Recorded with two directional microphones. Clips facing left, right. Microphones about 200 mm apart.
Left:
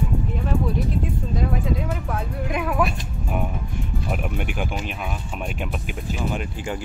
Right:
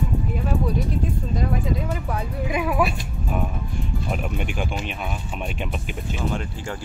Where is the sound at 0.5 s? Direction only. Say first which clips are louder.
Left 1 dB; centre (ahead or behind).